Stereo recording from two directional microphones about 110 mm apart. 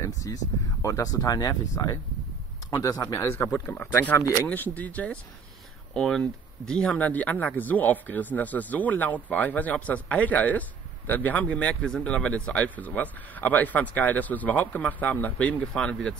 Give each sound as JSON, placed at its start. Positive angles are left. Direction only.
{"t": 0.0, "sound": "speech", "side_deg": 30}
{"t": 3.4, "sound": "speech", "side_deg": 15}